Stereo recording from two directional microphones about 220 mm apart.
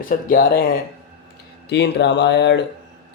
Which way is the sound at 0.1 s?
40° left (ahead or behind).